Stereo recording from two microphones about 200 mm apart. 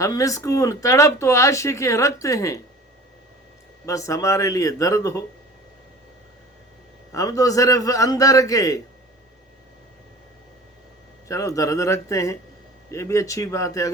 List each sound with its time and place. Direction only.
0.0 s speech: 15° left (ahead or behind)
3.8 s speech: 15° left (ahead or behind)
7.1 s speech: 15° left (ahead or behind)
11.3 s speech: 15° left (ahead or behind)